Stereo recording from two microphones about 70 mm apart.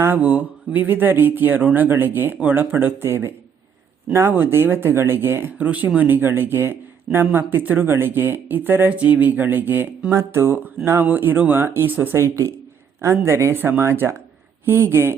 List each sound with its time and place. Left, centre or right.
0.2 s speech: right
5.5 s speech: right
12.1 s speech: right